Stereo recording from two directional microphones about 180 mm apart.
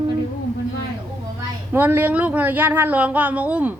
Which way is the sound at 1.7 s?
10° right (ahead or behind).